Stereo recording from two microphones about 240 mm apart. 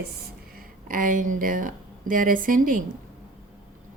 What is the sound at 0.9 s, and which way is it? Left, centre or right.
A woman's voice, right.